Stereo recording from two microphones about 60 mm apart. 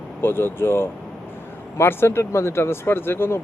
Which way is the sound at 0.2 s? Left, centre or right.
Left.